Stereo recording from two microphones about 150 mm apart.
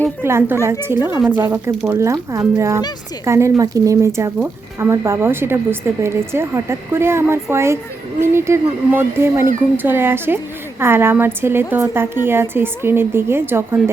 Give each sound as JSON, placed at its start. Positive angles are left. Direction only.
{"t": 0.2, "sound": "speech", "side_deg": -15}